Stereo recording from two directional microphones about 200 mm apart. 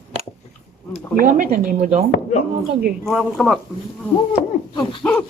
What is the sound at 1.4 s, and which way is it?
Speech, 40° right (ahead or behind).